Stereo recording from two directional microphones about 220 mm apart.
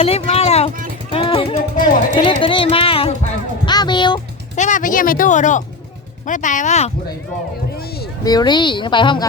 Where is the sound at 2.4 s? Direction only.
25° left (ahead or behind).